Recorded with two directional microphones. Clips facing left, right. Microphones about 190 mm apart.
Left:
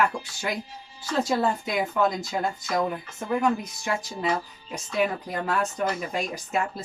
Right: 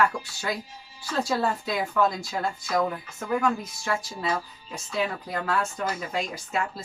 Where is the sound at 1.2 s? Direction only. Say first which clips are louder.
Left 2 dB; 20° left (ahead or behind).